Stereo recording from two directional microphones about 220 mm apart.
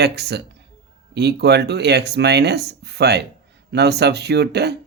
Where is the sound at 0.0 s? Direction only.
50° right (ahead or behind).